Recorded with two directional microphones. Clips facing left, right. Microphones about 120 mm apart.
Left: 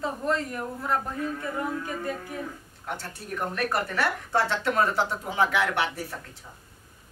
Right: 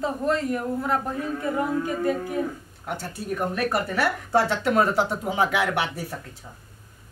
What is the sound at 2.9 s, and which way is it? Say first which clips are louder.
A woman's voice: right 5 dB; 15° right (ahead or behind).